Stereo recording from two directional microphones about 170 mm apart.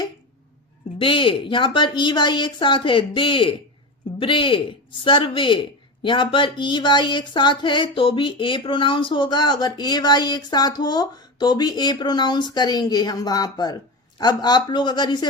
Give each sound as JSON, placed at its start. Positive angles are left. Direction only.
{"t": 0.9, "sound": "a man's voice", "side_deg": 30}